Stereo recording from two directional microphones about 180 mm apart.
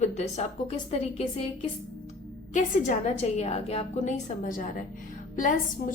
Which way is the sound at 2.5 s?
45° left (ahead or behind).